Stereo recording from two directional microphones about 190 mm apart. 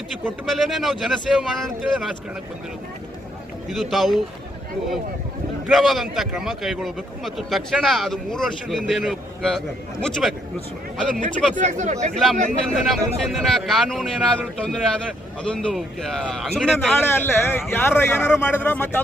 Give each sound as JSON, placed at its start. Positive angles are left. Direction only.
{"t": 0.3, "sound": "a man's voice", "side_deg": 0}
{"t": 3.7, "sound": "a man's voice", "side_deg": 0}
{"t": 5.6, "sound": "a man's voice", "side_deg": 0}
{"t": 11.5, "sound": "speech", "side_deg": -40}
{"t": 12.1, "sound": "a man's voice", "side_deg": 0}